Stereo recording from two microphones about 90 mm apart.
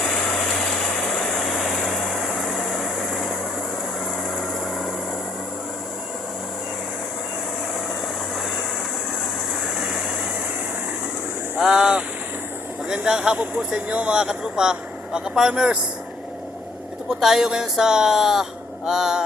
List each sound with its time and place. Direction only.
0.5 s vehicle: 5° left (ahead or behind)
4.4 s vehicle: centre (ahead or behind)
11.5 s boat: 10° right (ahead or behind)
12.9 s speech: 10° right (ahead or behind)
17.1 s speech: 5° right (ahead or behind)